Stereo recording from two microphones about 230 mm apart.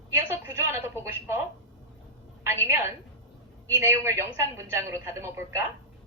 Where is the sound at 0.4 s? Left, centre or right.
Centre.